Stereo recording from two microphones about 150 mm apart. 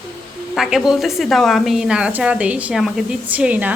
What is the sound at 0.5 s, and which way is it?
A woman's voice, centre (ahead or behind).